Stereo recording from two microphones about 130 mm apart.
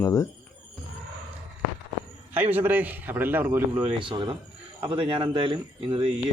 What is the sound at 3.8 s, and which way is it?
A man's voice, 40° right (ahead or behind).